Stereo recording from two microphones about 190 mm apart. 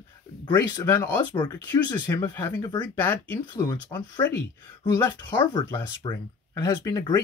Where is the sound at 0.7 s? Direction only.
20° left (ahead or behind).